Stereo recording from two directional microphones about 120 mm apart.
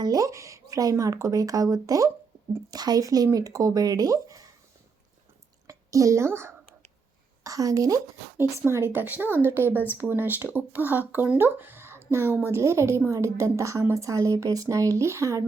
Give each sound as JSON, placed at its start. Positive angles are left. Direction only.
{"t": 0.0, "sound": "a woman's voice", "side_deg": -30}
{"t": 5.6, "sound": "a woman's voice", "side_deg": -25}